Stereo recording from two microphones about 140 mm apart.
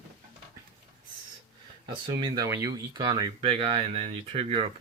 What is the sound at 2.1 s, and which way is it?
Speech, 30° right (ahead or behind).